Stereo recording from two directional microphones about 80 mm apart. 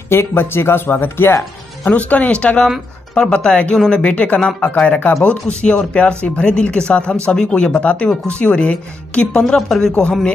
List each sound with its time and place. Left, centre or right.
0.1 s speech: left
1.9 s speech: centre